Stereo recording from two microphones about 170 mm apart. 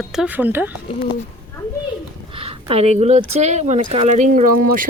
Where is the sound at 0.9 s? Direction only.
30° left (ahead or behind).